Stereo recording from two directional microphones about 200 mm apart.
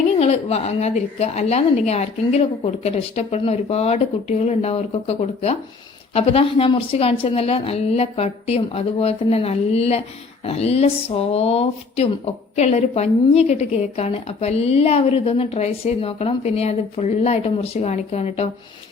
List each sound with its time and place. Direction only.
0.1 s a woman's voice: 30° left (ahead or behind)